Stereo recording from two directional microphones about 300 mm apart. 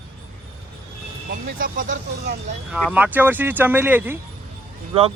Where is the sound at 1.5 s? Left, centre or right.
Right.